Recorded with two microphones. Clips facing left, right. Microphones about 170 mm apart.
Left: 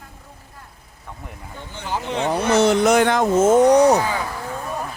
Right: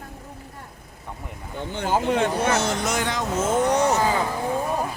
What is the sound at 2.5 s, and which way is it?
Speech, 60° left (ahead or behind).